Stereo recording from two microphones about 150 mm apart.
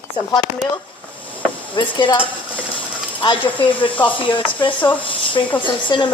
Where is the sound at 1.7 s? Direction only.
35° left (ahead or behind).